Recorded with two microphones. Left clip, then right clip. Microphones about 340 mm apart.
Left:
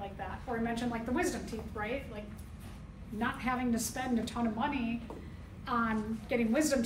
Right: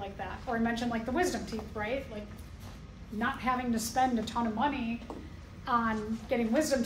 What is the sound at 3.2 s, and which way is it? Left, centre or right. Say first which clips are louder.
A woman's voice: right 3 dB; centre.